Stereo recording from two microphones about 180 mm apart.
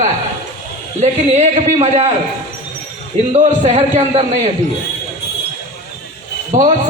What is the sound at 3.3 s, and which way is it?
A man's voice, 35° right (ahead or behind).